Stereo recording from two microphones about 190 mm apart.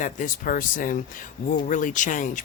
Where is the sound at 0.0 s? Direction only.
45° left (ahead or behind).